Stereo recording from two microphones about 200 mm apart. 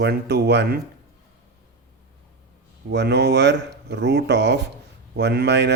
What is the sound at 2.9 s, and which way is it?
Speech, 55° right (ahead or behind).